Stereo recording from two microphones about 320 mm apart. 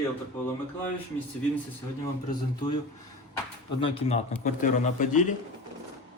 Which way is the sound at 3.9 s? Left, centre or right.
Left.